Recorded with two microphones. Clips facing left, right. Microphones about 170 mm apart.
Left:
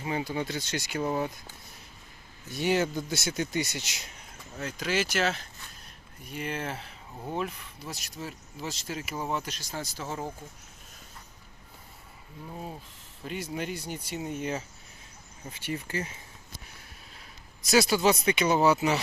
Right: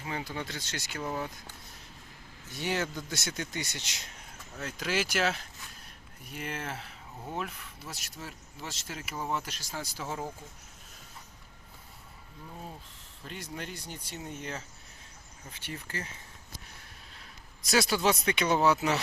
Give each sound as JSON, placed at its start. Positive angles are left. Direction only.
{"t": 0.0, "sound": "speech", "side_deg": 15}
{"t": 1.0, "sound": "speech", "side_deg": 25}
{"t": 2.5, "sound": "speech", "side_deg": 15}
{"t": 13.2, "sound": "speech", "side_deg": 10}
{"t": 15.6, "sound": "speech", "side_deg": 15}
{"t": 17.6, "sound": "speech", "side_deg": 0}